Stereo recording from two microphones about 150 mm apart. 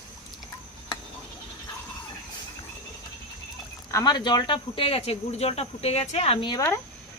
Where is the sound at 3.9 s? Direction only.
25° left (ahead or behind).